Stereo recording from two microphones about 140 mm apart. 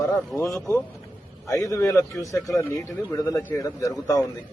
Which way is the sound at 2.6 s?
20° left (ahead or behind).